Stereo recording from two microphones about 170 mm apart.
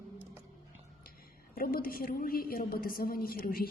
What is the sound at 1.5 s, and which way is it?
A woman's voice, 55° left (ahead or behind).